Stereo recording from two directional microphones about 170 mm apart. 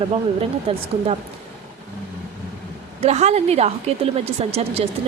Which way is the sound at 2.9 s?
40° right (ahead or behind).